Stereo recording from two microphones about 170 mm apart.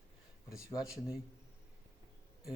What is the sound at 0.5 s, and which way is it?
Speech, 5° right (ahead or behind).